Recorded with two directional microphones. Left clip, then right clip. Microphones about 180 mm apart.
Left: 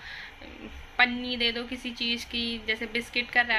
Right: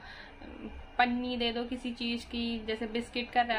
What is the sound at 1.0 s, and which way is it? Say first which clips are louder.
A woman's voice: left 4 dB; 10° right (ahead or behind).